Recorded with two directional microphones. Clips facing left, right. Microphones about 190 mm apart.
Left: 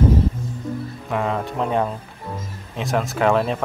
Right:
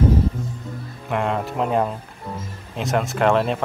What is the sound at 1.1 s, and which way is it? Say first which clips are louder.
Speech: right 1 dB; centre (ahead or behind).